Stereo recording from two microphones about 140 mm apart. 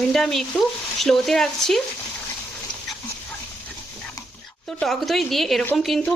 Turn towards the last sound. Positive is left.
turn(degrees=0)  # may be behind; listen again after turning